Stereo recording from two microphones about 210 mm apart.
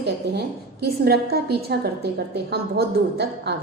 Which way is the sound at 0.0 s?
50° right (ahead or behind).